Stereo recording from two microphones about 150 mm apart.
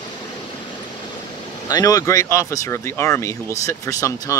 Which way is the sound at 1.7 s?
25° left (ahead or behind).